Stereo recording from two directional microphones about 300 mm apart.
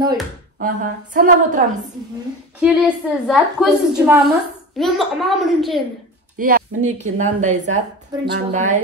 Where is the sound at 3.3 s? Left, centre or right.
Centre.